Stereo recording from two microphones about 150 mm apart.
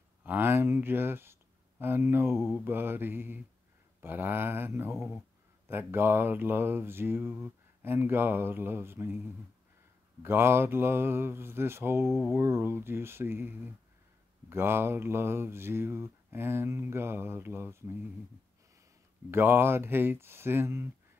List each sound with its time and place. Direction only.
0.2 s speech: 15° right (ahead or behind)
4.0 s mantra: 15° right (ahead or behind)
10.2 s mantra: 15° right (ahead or behind)
19.3 s mantra: 15° right (ahead or behind)